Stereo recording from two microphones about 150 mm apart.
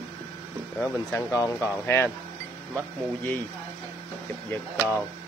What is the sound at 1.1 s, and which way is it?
Speech, 20° left (ahead or behind).